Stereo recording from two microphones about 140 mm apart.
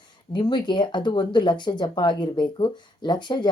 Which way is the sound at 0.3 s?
35° left (ahead or behind).